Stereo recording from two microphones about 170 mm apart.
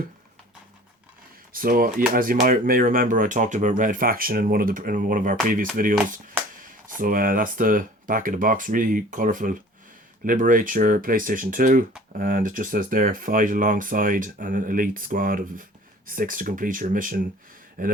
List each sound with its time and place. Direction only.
1.5 s speech: 55° right (ahead or behind)